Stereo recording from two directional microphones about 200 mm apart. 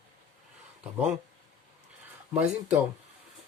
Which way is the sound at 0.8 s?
5° right (ahead or behind).